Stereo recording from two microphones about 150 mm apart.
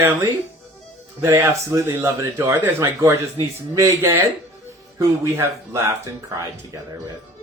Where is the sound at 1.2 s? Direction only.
20° right (ahead or behind).